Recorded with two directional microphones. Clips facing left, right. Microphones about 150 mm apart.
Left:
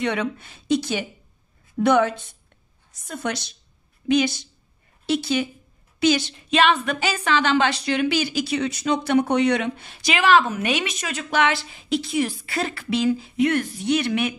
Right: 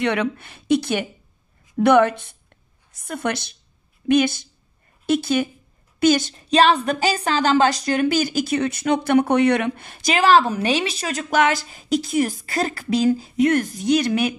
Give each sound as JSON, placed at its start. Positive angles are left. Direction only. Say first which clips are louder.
{"t": 0.0, "sound": "a woman's voice", "louder": "right 3 dB", "side_deg": -65}